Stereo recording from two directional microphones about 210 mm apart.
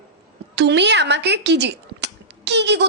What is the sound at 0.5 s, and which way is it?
Speech, 55° right (ahead or behind).